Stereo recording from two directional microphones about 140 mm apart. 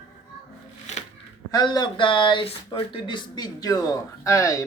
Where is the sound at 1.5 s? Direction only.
30° left (ahead or behind).